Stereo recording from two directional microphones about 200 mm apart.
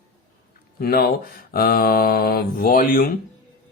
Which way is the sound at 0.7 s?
50° left (ahead or behind).